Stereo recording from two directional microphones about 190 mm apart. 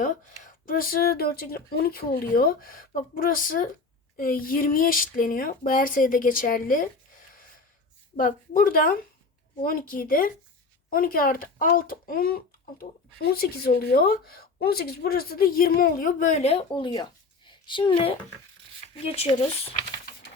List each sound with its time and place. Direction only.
0.0 s speech: 45° left (ahead or behind)
8.1 s speech: 45° left (ahead or behind)